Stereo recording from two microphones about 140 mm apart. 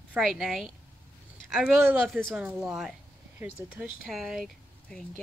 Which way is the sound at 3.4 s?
15° right (ahead or behind).